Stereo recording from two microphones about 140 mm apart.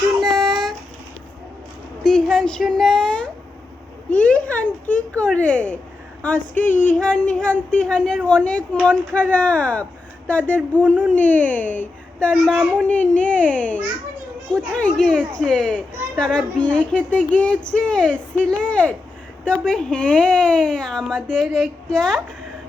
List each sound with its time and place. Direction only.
0.2 s child singing: centre (ahead or behind)
2.0 s a sound: 5° left (ahead or behind)
5.2 s speech: 10° left (ahead or behind)
6.5 s speech: 70° left (ahead or behind)
6.9 s speech: 5° left (ahead or behind)
12.3 s a woman's voice: centre (ahead or behind)